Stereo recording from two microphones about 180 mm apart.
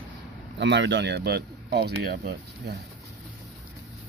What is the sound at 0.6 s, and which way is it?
Speech, 80° right.